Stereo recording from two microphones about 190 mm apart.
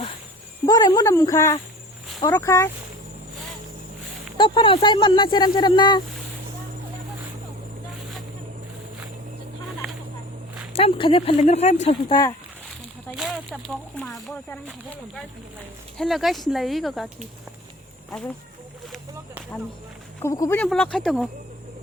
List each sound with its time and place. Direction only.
0.6 s speech: 20° left (ahead or behind)
4.4 s speech: 25° left (ahead or behind)
10.8 s speech: 30° left (ahead or behind)
13.1 s speech: centre (ahead or behind)
20.1 s speech: 15° left (ahead or behind)